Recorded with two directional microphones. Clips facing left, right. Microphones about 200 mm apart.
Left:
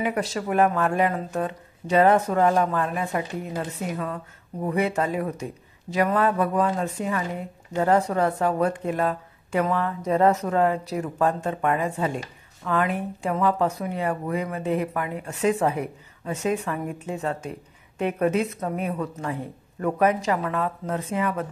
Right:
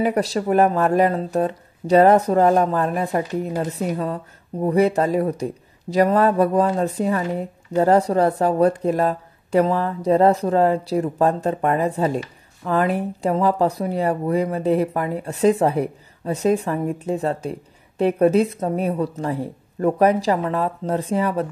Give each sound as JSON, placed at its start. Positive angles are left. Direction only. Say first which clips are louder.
{"t": 0.0, "sound": "speech", "louder": "right 6 dB", "side_deg": -35}